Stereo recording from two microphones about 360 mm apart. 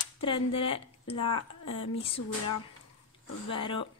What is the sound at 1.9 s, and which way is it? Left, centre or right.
Speech, centre.